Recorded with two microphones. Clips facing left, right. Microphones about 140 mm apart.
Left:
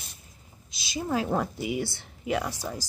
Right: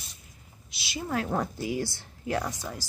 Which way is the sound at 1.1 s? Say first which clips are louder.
Left 2 dB; 10° left (ahead or behind).